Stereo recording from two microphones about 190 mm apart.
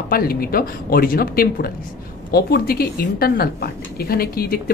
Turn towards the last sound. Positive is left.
turn(degrees=50)  # may be behind; listen again after turning